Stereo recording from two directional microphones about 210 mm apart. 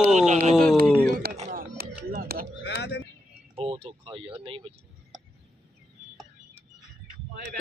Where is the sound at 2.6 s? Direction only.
55° left (ahead or behind).